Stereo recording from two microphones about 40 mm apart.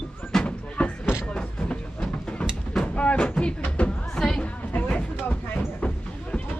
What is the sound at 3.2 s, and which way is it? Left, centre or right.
Music, left.